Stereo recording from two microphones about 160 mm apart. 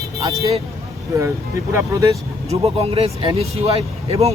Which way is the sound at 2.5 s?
40° right (ahead or behind).